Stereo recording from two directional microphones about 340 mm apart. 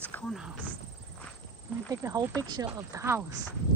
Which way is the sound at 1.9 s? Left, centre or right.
Centre.